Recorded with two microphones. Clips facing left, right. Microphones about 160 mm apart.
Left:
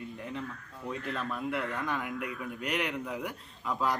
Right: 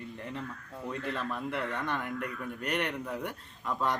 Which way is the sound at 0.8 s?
5° left (ahead or behind).